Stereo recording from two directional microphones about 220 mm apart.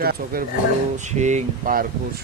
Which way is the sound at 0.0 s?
45° right (ahead or behind).